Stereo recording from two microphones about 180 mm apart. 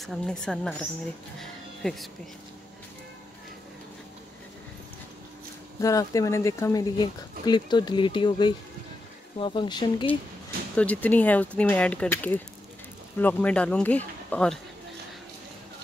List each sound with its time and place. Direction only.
0.0 s a woman's voice: 5° left (ahead or behind)
1.4 s music: centre (ahead or behind)
5.8 s speech: 20° left (ahead or behind)
10.8 s speech: 10° left (ahead or behind)